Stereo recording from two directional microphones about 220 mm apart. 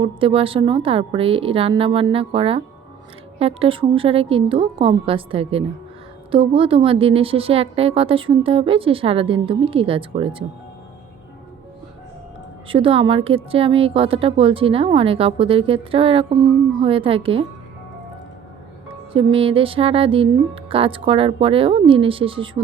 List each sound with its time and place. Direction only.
0.0 s a woman's voice: 25° right (ahead or behind)
12.6 s a woman's voice: 25° right (ahead or behind)
19.1 s a woman's voice: 25° right (ahead or behind)